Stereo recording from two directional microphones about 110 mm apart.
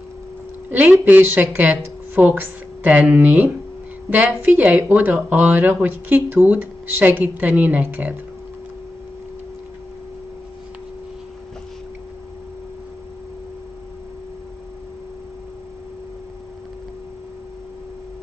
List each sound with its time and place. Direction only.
0.7 s speech: 15° right (ahead or behind)